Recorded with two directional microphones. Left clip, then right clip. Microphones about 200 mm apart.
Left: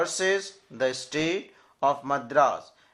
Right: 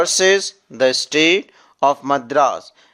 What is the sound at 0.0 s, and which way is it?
Speech, 45° right (ahead or behind).